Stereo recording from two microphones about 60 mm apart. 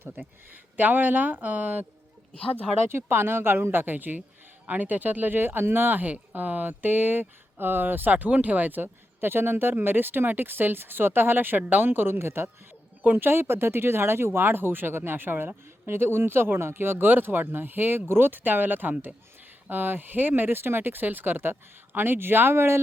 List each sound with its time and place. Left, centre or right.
0.0 s speech: right
2.9 s speech: right